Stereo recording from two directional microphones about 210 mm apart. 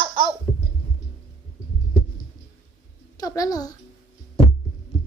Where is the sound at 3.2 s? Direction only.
15° left (ahead or behind).